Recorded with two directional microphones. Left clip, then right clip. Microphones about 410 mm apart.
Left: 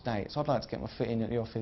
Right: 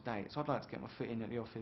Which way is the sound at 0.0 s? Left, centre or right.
Left.